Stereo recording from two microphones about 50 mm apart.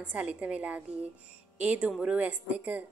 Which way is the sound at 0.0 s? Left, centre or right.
Right.